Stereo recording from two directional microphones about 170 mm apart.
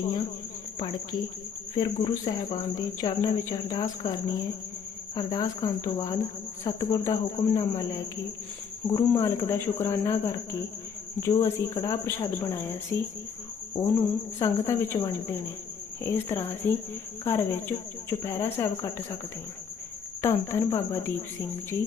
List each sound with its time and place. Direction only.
1.7 s speech: 25° left (ahead or behind)
12.5 s speech: 15° left (ahead or behind)
20.2 s speech: 15° left (ahead or behind)